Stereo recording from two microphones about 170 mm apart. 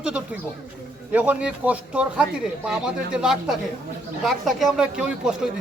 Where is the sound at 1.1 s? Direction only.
10° right (ahead or behind).